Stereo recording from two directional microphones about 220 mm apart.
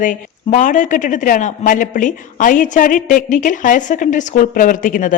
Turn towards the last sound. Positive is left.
turn(degrees=35)  # may be behind; listen again after turning